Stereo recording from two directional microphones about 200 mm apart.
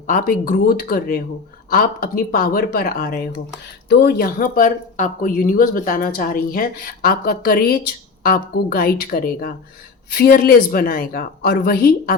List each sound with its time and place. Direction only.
0.1 s speech: 40° left (ahead or behind)